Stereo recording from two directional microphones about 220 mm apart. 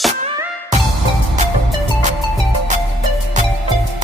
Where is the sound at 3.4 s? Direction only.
35° right (ahead or behind).